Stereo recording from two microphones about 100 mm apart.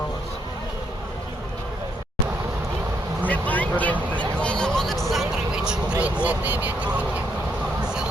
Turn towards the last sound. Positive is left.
turn(degrees=-15)  # may be behind; listen again after turning